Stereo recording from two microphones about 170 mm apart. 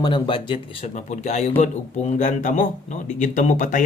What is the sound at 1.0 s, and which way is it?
Speech, 40° left (ahead or behind).